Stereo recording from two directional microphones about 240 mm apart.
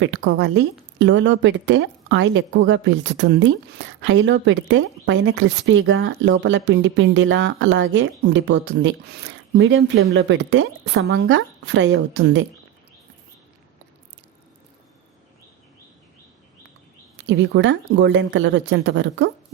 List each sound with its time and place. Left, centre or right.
0.0 s speech: right
17.2 s speech: right